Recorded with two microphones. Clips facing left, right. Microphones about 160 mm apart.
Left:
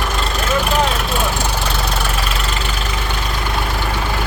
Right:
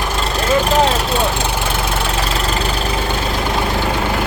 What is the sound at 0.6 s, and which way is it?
Vehicle, 35° right (ahead or behind).